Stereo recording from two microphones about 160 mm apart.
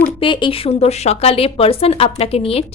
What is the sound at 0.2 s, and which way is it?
Speech, 30° left (ahead or behind).